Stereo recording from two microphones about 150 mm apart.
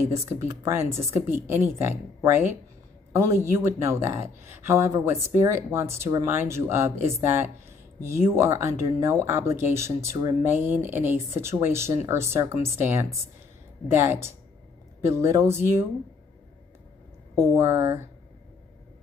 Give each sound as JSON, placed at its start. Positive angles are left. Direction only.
{"t": 0.3, "sound": "speech", "side_deg": -20}
{"t": 17.4, "sound": "speech", "side_deg": -15}